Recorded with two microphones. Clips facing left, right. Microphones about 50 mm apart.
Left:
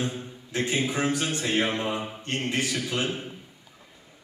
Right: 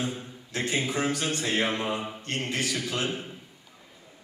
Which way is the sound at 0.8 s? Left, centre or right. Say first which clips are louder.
Left 1 dB; centre.